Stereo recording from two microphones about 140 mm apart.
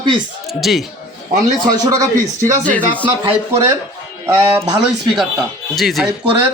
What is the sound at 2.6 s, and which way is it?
Speech, 10° left (ahead or behind).